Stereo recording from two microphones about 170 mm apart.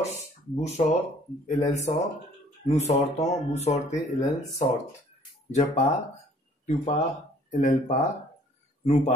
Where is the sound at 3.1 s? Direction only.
40° left (ahead or behind).